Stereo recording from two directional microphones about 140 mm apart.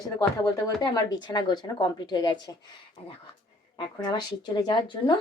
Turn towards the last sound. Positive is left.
turn(degrees=30)  # may be behind; listen again after turning